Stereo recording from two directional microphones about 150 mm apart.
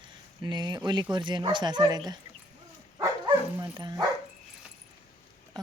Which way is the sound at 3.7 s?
25° right (ahead or behind).